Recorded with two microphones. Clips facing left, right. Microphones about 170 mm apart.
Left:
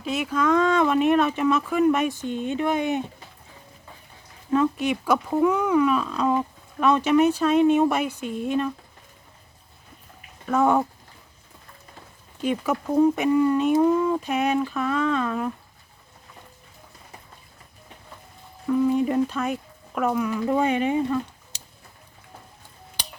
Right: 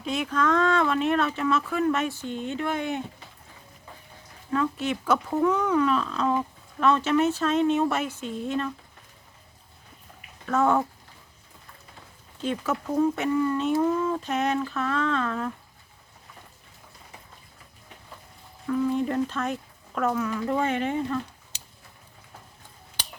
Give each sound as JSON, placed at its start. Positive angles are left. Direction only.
{"t": 0.0, "sound": "speech", "side_deg": 5}
{"t": 4.5, "sound": "speech", "side_deg": 15}
{"t": 10.4, "sound": "speech", "side_deg": 15}
{"t": 12.4, "sound": "speech", "side_deg": 15}
{"t": 18.7, "sound": "speech", "side_deg": 15}